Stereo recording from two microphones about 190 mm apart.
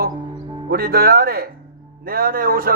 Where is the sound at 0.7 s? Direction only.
55° right (ahead or behind).